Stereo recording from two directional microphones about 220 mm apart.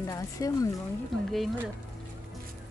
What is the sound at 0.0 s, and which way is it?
Speech, 15° left (ahead or behind).